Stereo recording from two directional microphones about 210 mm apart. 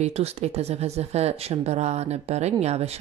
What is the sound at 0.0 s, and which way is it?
A woman's voice, 30° right (ahead or behind).